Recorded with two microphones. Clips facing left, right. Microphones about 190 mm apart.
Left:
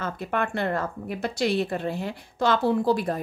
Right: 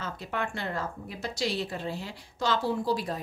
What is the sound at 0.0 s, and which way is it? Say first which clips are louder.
A woman's voice: left 6 dB; 55° left (ahead or behind).